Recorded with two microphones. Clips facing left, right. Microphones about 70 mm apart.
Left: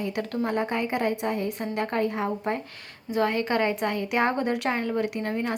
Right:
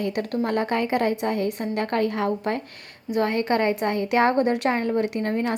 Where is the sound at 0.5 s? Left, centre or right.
Right.